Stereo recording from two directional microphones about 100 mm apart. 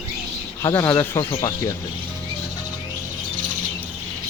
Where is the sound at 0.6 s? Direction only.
30° left (ahead or behind).